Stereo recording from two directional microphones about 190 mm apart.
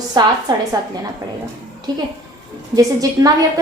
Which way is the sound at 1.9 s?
20° right (ahead or behind).